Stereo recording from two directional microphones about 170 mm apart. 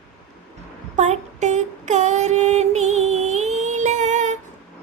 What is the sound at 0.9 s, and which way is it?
Female singing, 40° right (ahead or behind).